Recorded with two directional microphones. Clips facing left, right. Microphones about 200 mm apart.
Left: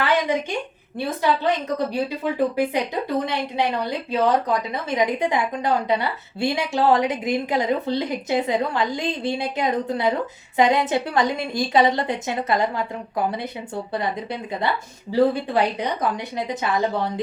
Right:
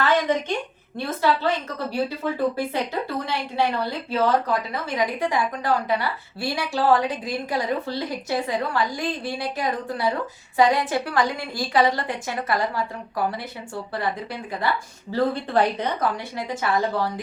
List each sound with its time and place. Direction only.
0.0 s a sound: 10° left (ahead or behind)
0.9 s a woman's voice: 15° left (ahead or behind)
15.1 s a woman's voice: 15° left (ahead or behind)